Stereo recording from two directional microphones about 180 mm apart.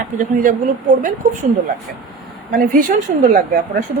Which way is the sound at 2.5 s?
50° right (ahead or behind).